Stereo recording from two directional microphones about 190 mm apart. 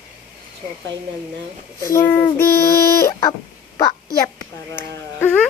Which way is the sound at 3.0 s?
15° left (ahead or behind).